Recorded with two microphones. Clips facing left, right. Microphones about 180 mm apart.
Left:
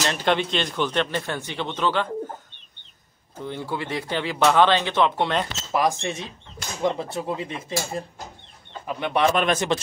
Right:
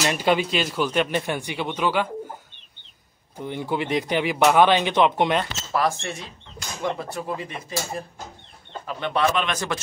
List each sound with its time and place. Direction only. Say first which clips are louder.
0.0 s speech: right 1 dB; 10° right (ahead or behind)
3.3 s speech: right 3 dB; 15° right (ahead or behind)
5.7 s speech: left 2 dB; 15° left (ahead or behind)
9.3 s speech: left 4 dB; 45° left (ahead or behind)